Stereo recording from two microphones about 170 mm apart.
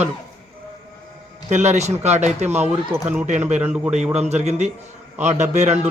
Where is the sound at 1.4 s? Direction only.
45° right (ahead or behind).